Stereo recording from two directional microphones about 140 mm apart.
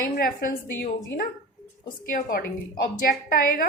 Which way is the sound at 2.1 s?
90° left.